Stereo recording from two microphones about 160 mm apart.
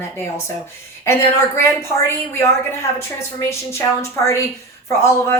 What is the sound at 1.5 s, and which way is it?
Speech, 15° left (ahead or behind).